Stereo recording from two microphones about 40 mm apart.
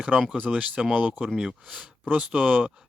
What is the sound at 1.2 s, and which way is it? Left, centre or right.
Speech, centre.